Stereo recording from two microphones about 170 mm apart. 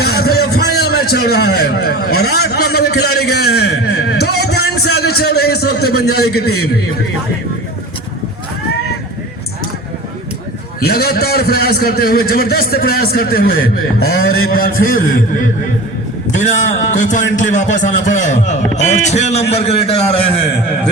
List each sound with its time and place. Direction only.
0.0 s a man's voice: 70° left (ahead or behind)
10.8 s a man's voice: 65° left (ahead or behind)
16.4 s a man's voice: 45° left (ahead or behind)